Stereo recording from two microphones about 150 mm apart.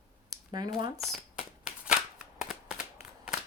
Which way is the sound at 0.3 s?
30° right (ahead or behind).